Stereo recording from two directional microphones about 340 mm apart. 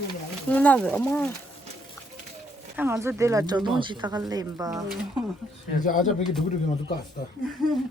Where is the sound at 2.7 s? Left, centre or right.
Centre.